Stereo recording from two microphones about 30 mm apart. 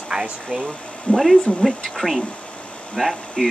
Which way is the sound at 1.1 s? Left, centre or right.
Centre.